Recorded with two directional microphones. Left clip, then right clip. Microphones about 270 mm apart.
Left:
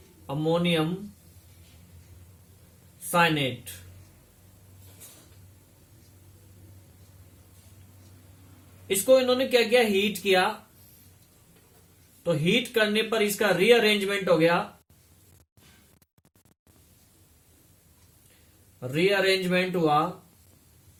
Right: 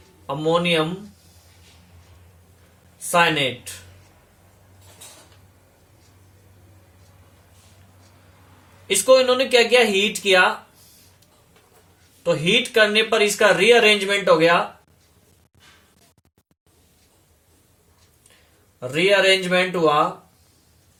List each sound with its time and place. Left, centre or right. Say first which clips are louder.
0.3 s speech: right 6 dB; centre
3.1 s speech: right 5 dB; centre
8.9 s speech: right 5 dB; centre
12.2 s speech: right 6 dB; centre
18.8 s speech: right 7 dB; centre